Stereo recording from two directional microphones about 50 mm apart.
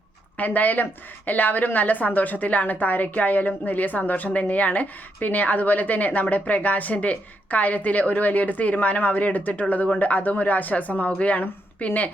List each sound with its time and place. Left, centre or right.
0.3 s a woman's voice: left